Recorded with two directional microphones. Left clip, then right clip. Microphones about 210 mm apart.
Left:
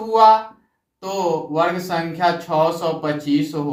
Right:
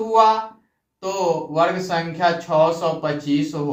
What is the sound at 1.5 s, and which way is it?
Speech, 20° right (ahead or behind).